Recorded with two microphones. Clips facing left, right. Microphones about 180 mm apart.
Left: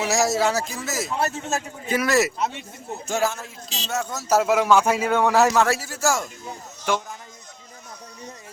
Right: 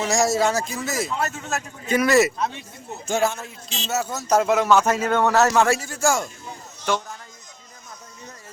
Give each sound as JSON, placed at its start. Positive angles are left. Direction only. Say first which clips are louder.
{"t": 0.0, "sound": "a man's voice", "louder": "right 1 dB", "side_deg": 5}
{"t": 1.2, "sound": "a man's voice", "louder": "left 2 dB", "side_deg": 25}
{"t": 1.9, "sound": "a man's voice", "louder": "right 3 dB", "side_deg": 0}